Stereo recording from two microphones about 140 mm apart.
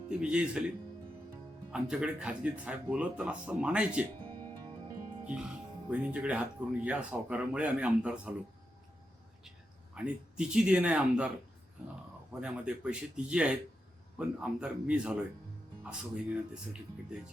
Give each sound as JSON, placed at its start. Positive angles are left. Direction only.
{"t": 0.1, "sound": "speech", "side_deg": -5}
{"t": 1.7, "sound": "speech", "side_deg": -5}
{"t": 5.2, "sound": "music", "side_deg": -10}
{"t": 5.9, "sound": "speech", "side_deg": -10}
{"t": 9.9, "sound": "speech", "side_deg": -5}
{"t": 12.3, "sound": "speech", "side_deg": -5}